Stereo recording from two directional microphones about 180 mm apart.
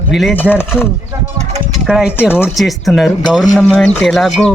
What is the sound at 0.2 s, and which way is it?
Speech, centre (ahead or behind).